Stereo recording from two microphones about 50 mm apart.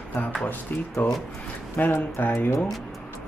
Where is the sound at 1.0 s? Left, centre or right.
Left.